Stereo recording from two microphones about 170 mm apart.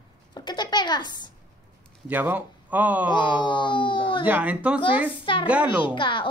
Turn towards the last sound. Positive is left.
turn(degrees=30)  # may be behind; listen again after turning